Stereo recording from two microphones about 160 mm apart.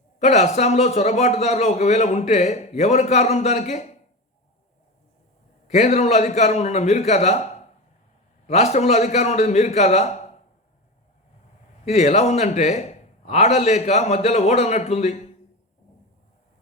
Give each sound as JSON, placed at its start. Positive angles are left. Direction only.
{"t": 0.2, "sound": "a man's voice", "side_deg": 45}
{"t": 5.6, "sound": "a man's voice", "side_deg": 45}
{"t": 8.4, "sound": "a man's voice", "side_deg": 45}
{"t": 11.9, "sound": "a man's voice", "side_deg": 45}